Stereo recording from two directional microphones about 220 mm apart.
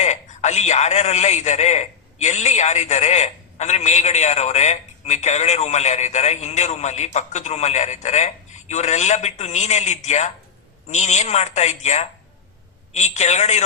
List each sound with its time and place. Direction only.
0.0 s a man's voice: 30° left (ahead or behind)